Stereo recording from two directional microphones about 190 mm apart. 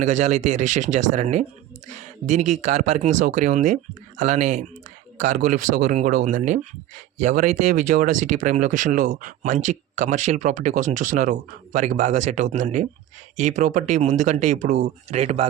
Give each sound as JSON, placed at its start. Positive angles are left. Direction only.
{"t": 0.0, "sound": "speech", "side_deg": -40}